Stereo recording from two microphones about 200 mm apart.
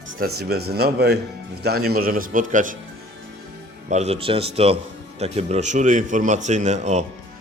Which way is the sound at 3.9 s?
35° right (ahead or behind).